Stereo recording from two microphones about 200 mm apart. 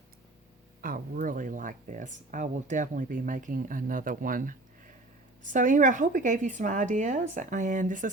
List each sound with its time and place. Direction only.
0.8 s speech: 45° right (ahead or behind)